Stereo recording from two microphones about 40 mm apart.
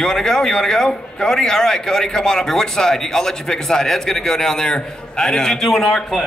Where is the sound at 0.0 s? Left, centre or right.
Centre.